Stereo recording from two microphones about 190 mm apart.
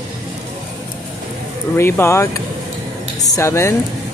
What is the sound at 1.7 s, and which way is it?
Speech, 15° left (ahead or behind).